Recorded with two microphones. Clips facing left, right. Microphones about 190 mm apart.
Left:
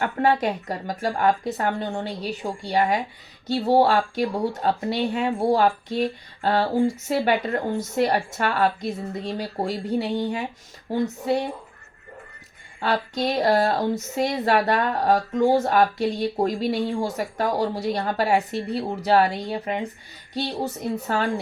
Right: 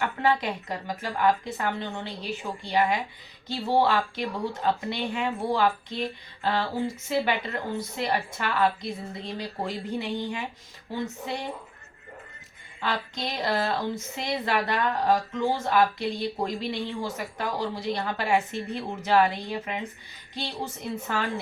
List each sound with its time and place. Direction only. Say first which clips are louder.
0.0 s speech: left 4 dB; 45° left (ahead or behind)
12.8 s speech: left 7 dB; 40° left (ahead or behind)